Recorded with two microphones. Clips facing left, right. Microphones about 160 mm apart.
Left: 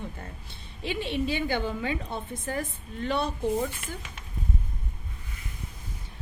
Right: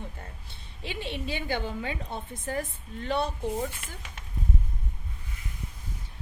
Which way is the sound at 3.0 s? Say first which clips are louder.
Even; 45° right (ahead or behind).